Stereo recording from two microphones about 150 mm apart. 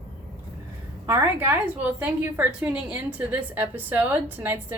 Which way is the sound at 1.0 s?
15° right (ahead or behind).